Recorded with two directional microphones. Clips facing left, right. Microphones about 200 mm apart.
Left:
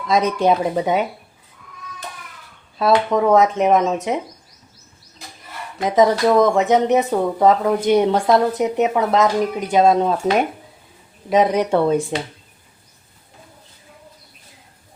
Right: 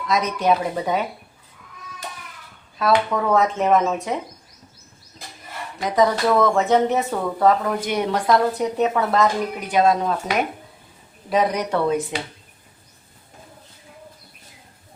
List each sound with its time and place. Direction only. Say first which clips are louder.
0.1 s a woman's voice: left 3 dB; 30° left (ahead or behind)
2.7 s a woman's voice: left 3 dB; 25° left (ahead or behind)
5.8 s a woman's voice: left 4 dB; 20° left (ahead or behind)
11.3 s a woman's voice: left 5 dB; 25° left (ahead or behind)